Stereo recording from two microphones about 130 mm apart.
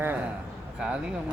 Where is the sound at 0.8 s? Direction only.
5° right (ahead or behind).